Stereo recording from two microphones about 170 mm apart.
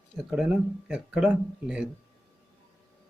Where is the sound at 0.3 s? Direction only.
5° right (ahead or behind).